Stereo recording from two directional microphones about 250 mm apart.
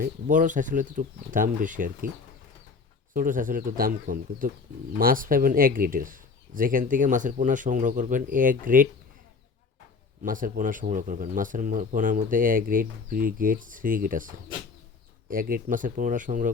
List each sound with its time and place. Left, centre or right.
0.0 s speech: right
3.2 s speech: right
10.2 s speech: right